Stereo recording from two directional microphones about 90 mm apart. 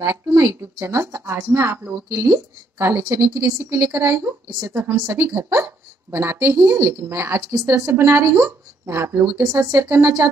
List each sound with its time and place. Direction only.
0.0 s a woman's voice: 30° right (ahead or behind)